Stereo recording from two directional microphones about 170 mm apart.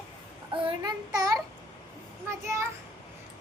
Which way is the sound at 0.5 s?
25° right (ahead or behind).